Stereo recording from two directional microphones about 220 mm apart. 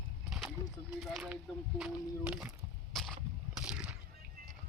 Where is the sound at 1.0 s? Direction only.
Centre (ahead or behind).